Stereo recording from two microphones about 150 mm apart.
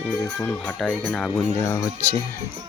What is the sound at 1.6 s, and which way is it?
Speech, 20° left (ahead or behind).